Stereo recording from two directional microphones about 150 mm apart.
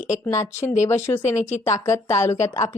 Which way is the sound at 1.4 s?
50° left (ahead or behind).